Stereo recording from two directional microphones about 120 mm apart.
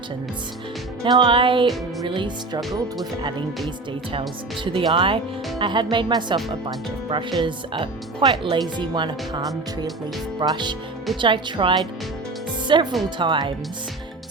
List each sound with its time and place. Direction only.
1.0 s music: 40° right (ahead or behind)
2.0 s speech: 40° right (ahead or behind)